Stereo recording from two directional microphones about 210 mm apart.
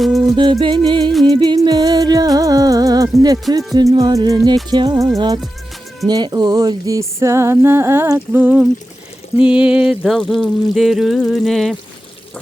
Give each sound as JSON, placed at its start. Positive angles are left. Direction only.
{"t": 0.0, "sound": "music", "side_deg": 0}
{"t": 0.3, "sound": "music", "side_deg": -25}
{"t": 9.4, "sound": "speech", "side_deg": -5}